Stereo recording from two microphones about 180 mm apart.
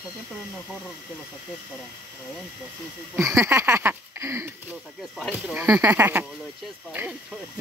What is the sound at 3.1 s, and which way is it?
Speech, 15° right (ahead or behind).